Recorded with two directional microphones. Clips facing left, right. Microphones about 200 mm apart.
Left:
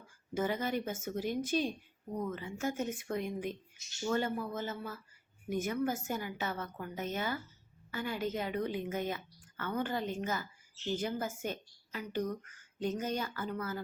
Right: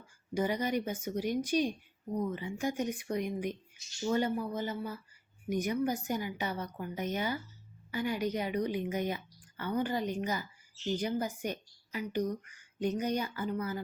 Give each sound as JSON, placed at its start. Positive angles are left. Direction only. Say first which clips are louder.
{"t": 0.3, "sound": "a woman's voice", "louder": "right 2 dB", "side_deg": -15}